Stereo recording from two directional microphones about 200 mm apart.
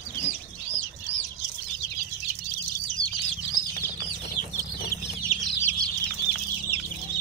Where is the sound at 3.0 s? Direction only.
20° right (ahead or behind).